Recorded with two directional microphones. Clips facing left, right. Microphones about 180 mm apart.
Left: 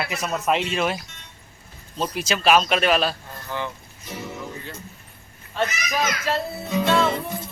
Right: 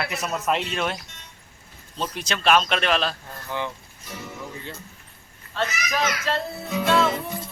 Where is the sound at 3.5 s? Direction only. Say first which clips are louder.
Even; 15° right (ahead or behind).